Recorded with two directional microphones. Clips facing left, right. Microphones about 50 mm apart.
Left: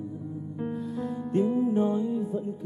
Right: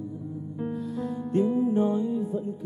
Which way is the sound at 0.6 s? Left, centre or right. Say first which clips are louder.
Right 1 dB; left.